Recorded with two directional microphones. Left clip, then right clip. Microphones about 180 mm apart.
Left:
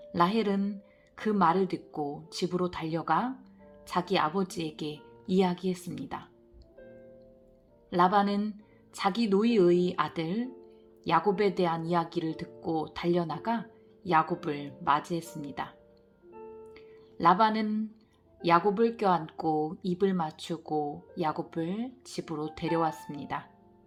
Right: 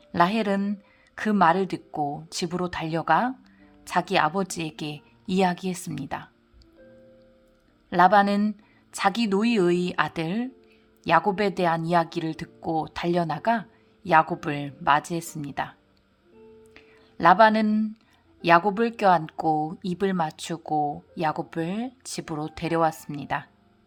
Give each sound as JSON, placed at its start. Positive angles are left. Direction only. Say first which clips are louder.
{"t": 0.1, "sound": "speech", "louder": "right 5 dB", "side_deg": -35}
{"t": 7.9, "sound": "speech", "louder": "right 7 dB", "side_deg": -35}
{"t": 16.7, "sound": "a sound", "louder": "right 3 dB", "side_deg": -35}
{"t": 18.4, "sound": "speech", "louder": "right 5 dB", "side_deg": -40}